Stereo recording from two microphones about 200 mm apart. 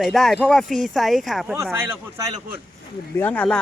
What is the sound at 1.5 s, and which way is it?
Speech, 15° right (ahead or behind).